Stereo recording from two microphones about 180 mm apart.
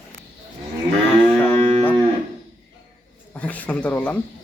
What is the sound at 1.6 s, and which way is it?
Cattle, 35° right (ahead or behind).